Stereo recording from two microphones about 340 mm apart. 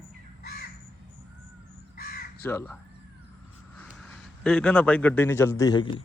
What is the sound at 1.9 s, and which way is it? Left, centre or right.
Crow, left.